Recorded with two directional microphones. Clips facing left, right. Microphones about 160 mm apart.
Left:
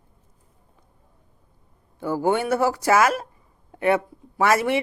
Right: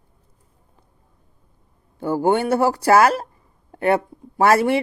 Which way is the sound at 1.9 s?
30° right (ahead or behind).